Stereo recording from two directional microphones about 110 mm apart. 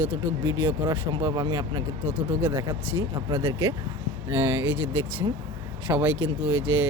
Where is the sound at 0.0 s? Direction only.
20° right (ahead or behind); by 1.8 s 35° right (ahead or behind).